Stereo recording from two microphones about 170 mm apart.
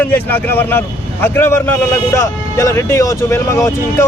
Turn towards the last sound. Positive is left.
turn(degrees=15)  # may be behind; listen again after turning